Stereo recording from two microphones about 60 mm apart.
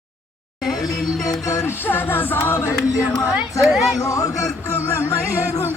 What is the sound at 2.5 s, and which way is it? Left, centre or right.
Music, left.